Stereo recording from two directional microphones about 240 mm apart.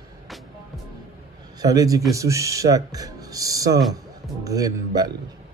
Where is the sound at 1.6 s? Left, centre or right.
Centre.